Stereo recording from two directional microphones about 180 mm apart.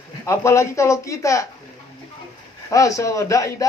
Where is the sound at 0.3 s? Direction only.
15° left (ahead or behind).